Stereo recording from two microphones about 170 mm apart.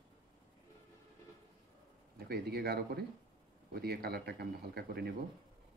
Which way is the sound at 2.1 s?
65° right (ahead or behind).